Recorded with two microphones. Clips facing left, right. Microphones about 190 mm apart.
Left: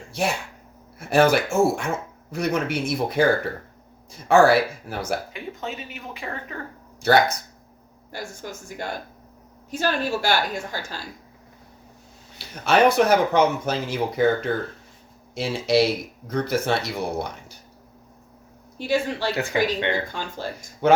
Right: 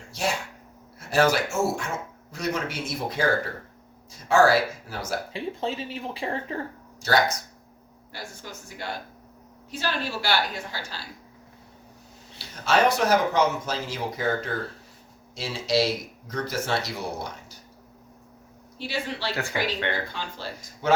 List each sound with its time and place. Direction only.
0.1 s speech: 60° left (ahead or behind)
4.3 s speech: 60° left (ahead or behind)
5.3 s speech: 30° right (ahead or behind)
7.0 s speech: 60° left (ahead or behind)
8.1 s a woman's voice: 45° left (ahead or behind)
12.6 s speech: 60° left (ahead or behind)
15.4 s speech: 60° left (ahead or behind)
18.8 s a woman's voice: 50° left (ahead or behind)
19.5 s speech: 20° left (ahead or behind)
20.1 s a woman's voice: 50° left (ahead or behind)